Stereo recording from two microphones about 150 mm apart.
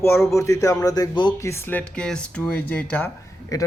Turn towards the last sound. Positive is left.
turn(degrees=25)  # may be behind; listen again after turning